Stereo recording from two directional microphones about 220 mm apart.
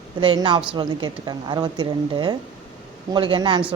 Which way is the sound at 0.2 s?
20° right (ahead or behind).